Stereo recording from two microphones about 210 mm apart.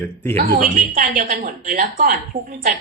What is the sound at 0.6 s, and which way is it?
Speech, 40° right (ahead or behind).